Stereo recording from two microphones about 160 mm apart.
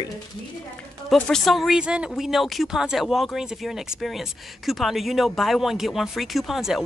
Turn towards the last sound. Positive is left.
turn(degrees=0)  # may be behind; listen again after turning